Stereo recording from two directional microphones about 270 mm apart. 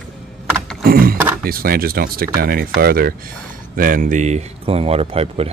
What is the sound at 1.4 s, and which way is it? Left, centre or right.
Speech, right.